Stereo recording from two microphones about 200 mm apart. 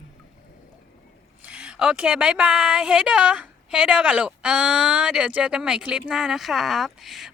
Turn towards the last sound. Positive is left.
turn(degrees=0)  # may be behind; listen again after turning